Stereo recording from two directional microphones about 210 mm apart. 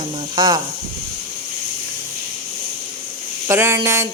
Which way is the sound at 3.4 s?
10° right (ahead or behind).